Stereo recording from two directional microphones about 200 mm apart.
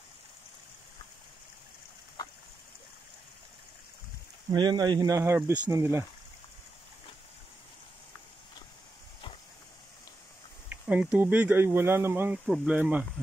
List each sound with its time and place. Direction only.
4.5 s speech: 20° right (ahead or behind)
10.7 s speech: 10° right (ahead or behind)